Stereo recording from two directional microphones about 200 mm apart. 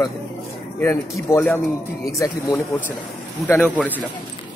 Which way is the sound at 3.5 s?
5° left (ahead or behind).